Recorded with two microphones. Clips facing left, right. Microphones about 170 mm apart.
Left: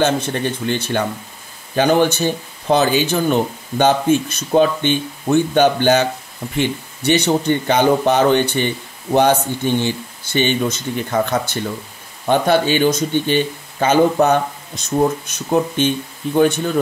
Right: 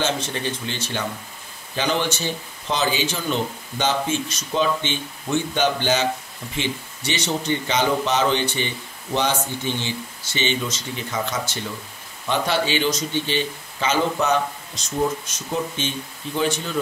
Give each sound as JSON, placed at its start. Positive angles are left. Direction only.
{"t": 0.0, "sound": "speech", "side_deg": 55}